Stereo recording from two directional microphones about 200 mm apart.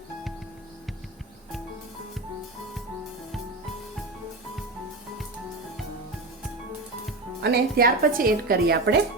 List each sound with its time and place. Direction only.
7.4 s speech: 50° right (ahead or behind)